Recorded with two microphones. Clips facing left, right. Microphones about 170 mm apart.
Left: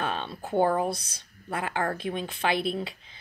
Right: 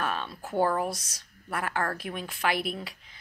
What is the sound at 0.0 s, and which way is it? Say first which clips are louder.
Speech: left 1 dB; 25° left (ahead or behind).